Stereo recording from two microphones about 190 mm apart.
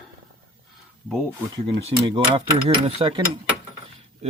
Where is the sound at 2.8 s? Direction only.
25° right (ahead or behind).